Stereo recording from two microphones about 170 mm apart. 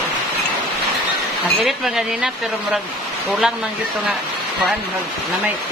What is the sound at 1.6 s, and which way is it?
Speech, centre (ahead or behind).